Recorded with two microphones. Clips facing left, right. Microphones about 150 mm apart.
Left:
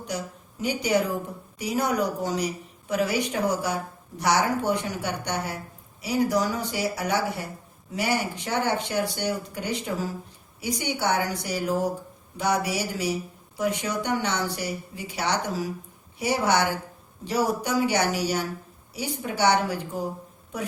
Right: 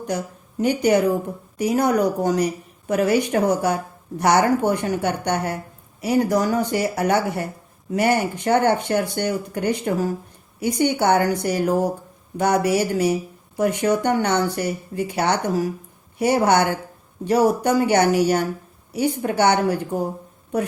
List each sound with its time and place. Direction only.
0.6 s a woman's voice: 55° right (ahead or behind)